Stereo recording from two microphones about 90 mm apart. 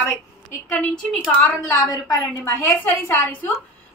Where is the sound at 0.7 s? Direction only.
15° left (ahead or behind).